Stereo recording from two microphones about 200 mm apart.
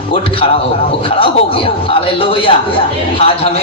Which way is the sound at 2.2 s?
25° left (ahead or behind).